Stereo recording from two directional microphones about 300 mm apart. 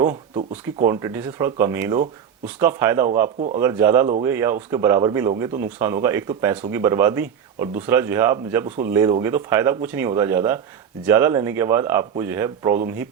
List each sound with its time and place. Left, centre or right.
0.0 s speech: centre
8.6 s speech: right
8.9 s speech: centre